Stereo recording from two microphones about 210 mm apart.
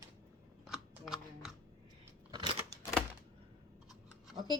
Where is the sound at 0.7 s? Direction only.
Centre (ahead or behind).